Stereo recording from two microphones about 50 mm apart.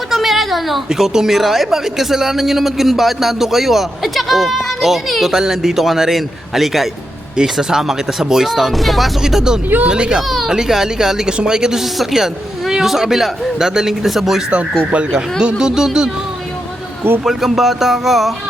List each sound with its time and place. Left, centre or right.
0.1 s a sound: centre
0.9 s a man's voice: centre
9.2 s a man's voice: centre
10.2 s baby cry: centre
10.5 s a man's voice: centre
14.8 s a man's voice: right
17.2 s speech: centre